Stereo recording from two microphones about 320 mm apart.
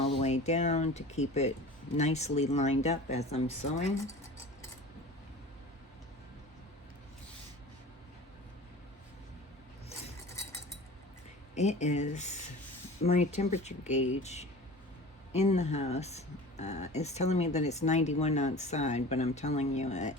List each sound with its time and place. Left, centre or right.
0.0 s speech: centre
11.5 s speech: left